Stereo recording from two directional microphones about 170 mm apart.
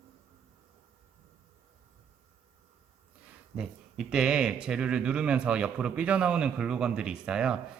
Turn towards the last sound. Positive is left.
turn(degrees=-5)  # may be behind; listen again after turning